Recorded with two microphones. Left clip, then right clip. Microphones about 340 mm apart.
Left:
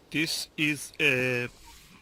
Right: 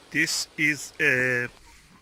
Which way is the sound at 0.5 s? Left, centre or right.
Centre.